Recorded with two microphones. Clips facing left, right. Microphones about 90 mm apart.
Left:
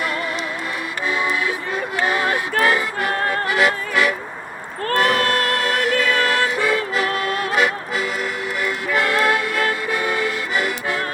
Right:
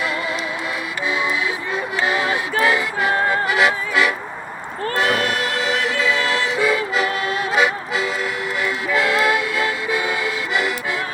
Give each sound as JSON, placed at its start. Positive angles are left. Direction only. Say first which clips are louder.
{"t": 2.0, "sound": "music", "louder": "left 1 dB", "side_deg": 45}